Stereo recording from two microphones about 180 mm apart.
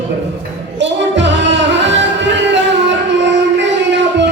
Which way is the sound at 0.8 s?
80° right.